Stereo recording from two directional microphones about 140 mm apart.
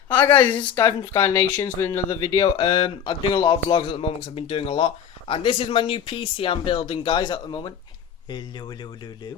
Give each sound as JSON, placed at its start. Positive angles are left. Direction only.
{"t": 0.1, "sound": "speech", "side_deg": 15}